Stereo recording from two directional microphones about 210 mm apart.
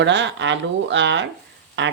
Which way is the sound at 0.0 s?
60° right (ahead or behind).